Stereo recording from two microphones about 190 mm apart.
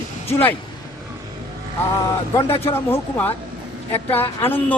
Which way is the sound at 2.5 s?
30° left (ahead or behind).